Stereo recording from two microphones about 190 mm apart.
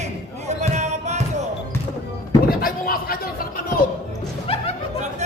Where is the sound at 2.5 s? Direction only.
50° left (ahead or behind).